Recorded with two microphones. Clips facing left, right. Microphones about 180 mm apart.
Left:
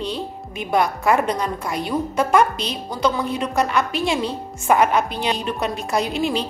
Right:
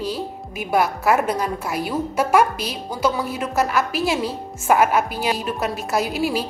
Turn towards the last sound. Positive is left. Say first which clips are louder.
# even
turn(degrees=-5)  # may be behind; listen again after turning